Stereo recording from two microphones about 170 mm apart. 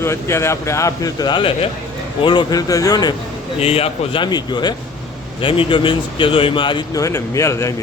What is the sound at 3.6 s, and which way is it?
Speech, 35° left (ahead or behind).